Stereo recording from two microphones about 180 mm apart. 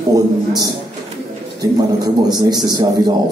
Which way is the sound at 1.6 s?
20° right (ahead or behind).